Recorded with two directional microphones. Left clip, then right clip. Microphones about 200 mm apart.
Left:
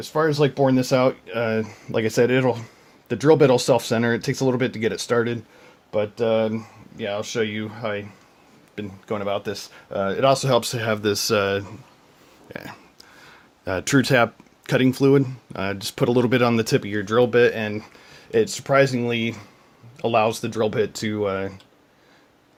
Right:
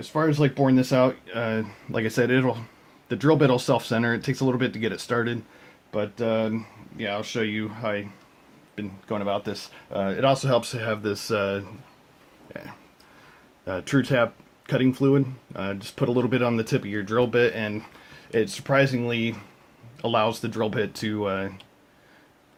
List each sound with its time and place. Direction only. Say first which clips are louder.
0.0 s speech: left 3 dB; 35° left (ahead or behind); by 12.7 s 50° left (ahead or behind)
13.7 s speech: left 5 dB; 50° left (ahead or behind); by 21.5 s 30° left (ahead or behind)